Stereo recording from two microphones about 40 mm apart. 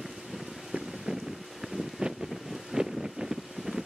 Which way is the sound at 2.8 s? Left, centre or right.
Centre.